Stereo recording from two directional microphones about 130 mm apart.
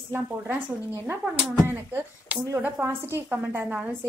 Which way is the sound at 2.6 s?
15° right (ahead or behind).